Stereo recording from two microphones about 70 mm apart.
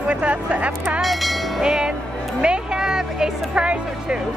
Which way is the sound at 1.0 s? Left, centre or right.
Centre.